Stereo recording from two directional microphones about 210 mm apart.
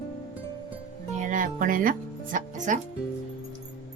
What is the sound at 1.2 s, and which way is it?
Speech, 40° right (ahead or behind).